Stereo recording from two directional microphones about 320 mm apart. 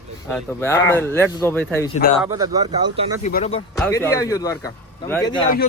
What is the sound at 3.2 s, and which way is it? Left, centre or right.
Speech, left.